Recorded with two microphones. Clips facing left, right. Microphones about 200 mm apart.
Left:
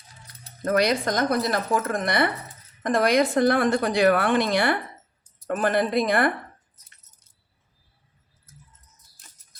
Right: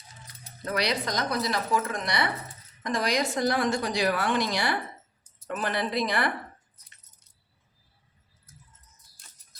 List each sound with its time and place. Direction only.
0.6 s a woman's voice: 50° left (ahead or behind)